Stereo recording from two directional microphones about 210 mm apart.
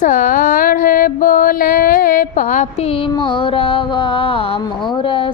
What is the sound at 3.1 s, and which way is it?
Music, 25° left (ahead or behind).